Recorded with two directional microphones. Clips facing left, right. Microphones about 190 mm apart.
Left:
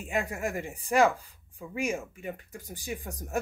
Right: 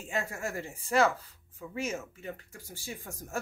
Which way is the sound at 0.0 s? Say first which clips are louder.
Left 4 dB; 15° left (ahead or behind).